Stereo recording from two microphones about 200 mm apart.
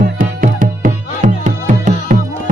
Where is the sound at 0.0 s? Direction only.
40° right (ahead or behind).